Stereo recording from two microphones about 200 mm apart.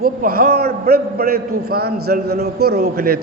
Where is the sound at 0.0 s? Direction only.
50° right (ahead or behind).